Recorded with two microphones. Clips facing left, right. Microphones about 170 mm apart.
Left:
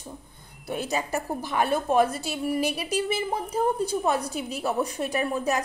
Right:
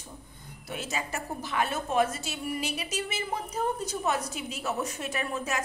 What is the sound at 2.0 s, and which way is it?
Speech, 60° left (ahead or behind).